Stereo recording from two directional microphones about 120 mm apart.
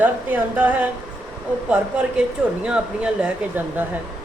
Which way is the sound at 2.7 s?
10° right (ahead or behind).